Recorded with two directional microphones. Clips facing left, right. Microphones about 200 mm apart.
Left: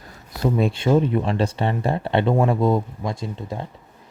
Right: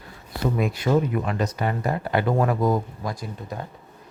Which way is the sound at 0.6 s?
30° left (ahead or behind).